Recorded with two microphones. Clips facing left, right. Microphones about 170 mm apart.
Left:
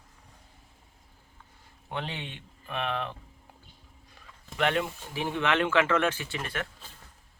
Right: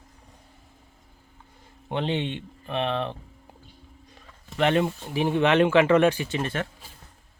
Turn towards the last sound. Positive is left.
turn(degrees=-25)  # may be behind; listen again after turning